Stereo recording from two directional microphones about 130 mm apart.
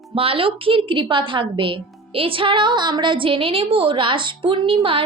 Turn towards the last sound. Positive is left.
turn(degrees=-40)  # may be behind; listen again after turning